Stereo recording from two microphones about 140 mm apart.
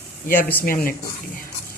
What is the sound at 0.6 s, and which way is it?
Speech, 85° left.